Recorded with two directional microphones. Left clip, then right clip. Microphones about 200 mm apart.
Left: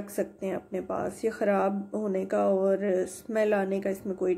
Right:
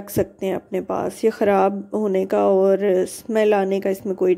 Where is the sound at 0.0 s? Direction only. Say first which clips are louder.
Right 9 dB; 35° right (ahead or behind).